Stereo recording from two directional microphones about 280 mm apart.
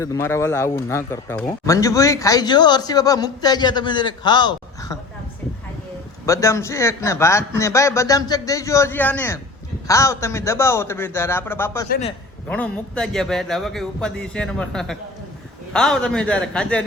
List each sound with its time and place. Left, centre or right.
0.0 s speech: centre
6.2 s speech: centre
11.9 s a man's voice: left
12.5 s a man's voice: centre